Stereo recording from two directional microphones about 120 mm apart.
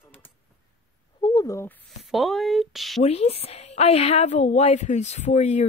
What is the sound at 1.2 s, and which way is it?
Speech, 30° left (ahead or behind).